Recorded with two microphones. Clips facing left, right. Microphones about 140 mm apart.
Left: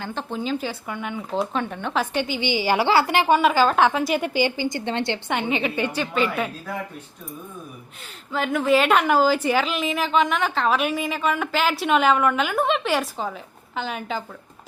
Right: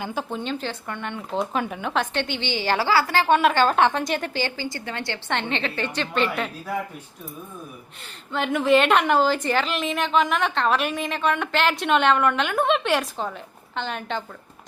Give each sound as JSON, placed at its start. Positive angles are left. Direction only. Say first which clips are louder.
{"t": 0.0, "sound": "speech", "louder": "right 1 dB", "side_deg": -10}
{"t": 0.3, "sound": "a woman's voice", "louder": "left 2 dB", "side_deg": 5}
{"t": 2.8, "sound": "a woman's voice", "louder": "left 1 dB", "side_deg": 20}
{"t": 3.2, "sound": "a woman's voice", "louder": "left 1 dB", "side_deg": 5}
{"t": 5.3, "sound": "a woman's voice", "louder": "even", "side_deg": 10}
{"t": 8.3, "sound": "a woman's voice", "louder": "right 1 dB", "side_deg": 0}